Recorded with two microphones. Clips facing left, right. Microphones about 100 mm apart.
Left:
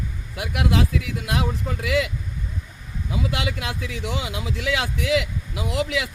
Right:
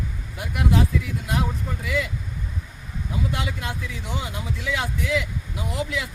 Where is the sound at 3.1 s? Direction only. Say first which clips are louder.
Left 2 dB; 90° left.